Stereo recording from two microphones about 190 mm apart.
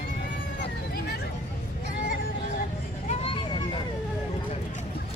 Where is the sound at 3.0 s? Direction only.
30° left (ahead or behind).